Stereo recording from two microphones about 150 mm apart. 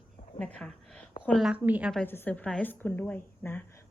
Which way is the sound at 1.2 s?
Centre (ahead or behind).